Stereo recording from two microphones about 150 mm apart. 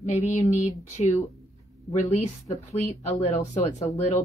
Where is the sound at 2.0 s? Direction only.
50° left (ahead or behind).